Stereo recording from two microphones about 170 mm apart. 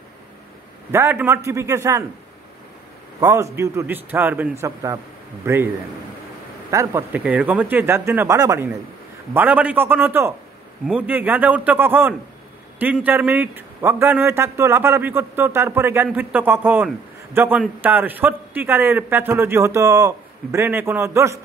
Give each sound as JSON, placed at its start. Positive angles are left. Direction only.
{"t": 0.9, "sound": "a man's voice", "side_deg": -15}
{"t": 3.2, "sound": "a man's voice", "side_deg": -15}
{"t": 6.7, "sound": "a man's voice", "side_deg": -15}